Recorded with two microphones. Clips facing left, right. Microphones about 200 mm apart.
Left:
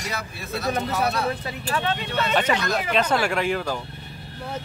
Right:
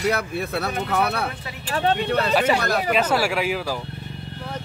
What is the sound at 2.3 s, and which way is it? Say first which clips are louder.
Speech: even; 5° right (ahead or behind).